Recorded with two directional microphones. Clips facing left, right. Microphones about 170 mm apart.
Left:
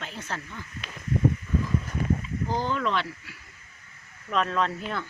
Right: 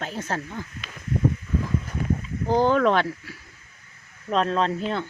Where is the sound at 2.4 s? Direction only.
60° right (ahead or behind).